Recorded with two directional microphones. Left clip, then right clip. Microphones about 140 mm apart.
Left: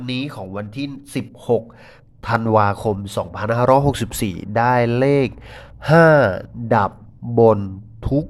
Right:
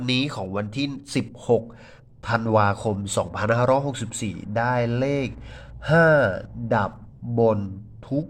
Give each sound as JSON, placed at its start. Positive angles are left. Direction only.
{"t": 0.0, "sound": "speech", "side_deg": -5}
{"t": 1.5, "sound": "a man's voice", "side_deg": 15}
{"t": 3.6, "sound": "a man's voice", "side_deg": 35}